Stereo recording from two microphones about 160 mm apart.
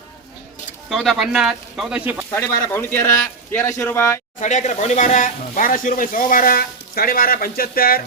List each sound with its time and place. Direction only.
0.9 s speech: centre (ahead or behind)
2.3 s speech: 15° left (ahead or behind)
4.4 s speech: 50° left (ahead or behind); by 8.0 s 65° left (ahead or behind)